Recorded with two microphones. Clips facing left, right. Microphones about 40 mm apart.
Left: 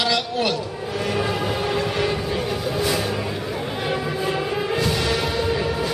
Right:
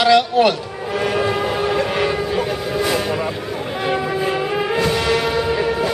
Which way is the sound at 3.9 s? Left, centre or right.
Centre.